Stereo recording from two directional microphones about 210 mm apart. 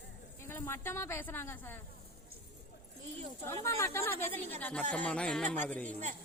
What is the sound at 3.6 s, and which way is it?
A woman's voice, 15° left (ahead or behind).